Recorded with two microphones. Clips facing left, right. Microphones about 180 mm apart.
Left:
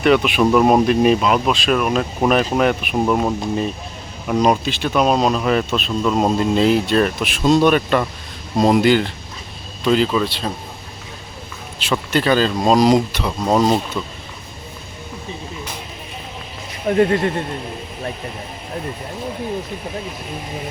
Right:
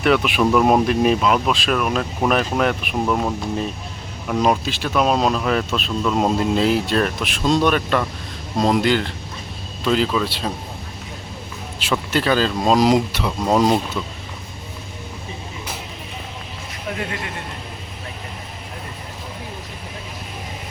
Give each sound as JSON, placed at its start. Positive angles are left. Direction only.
{"t": 0.0, "sound": "speech", "side_deg": 0}
{"t": 11.8, "sound": "speech", "side_deg": -5}
{"t": 17.0, "sound": "speech", "side_deg": 40}